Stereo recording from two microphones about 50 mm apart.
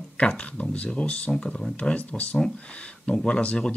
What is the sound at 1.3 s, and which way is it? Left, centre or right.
Speech, centre.